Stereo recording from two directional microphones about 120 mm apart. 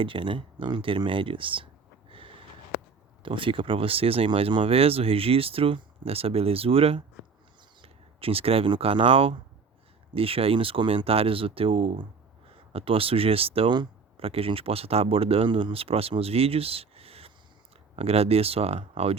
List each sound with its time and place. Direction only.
0.0 s speech: 45° right (ahead or behind)
2.0 s a sound: 45° right (ahead or behind)
3.2 s speech: 45° right (ahead or behind)